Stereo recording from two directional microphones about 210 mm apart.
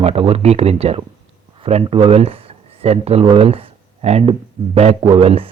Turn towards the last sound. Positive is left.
turn(degrees=-25)  # may be behind; listen again after turning